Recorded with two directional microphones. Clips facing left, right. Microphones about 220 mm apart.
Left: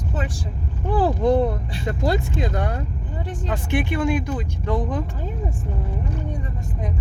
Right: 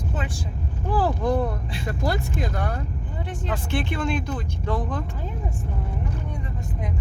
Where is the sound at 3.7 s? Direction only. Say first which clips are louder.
Left 5 dB; 15° left (ahead or behind).